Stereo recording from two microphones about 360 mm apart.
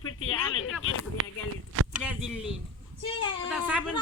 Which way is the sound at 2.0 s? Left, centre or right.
Centre.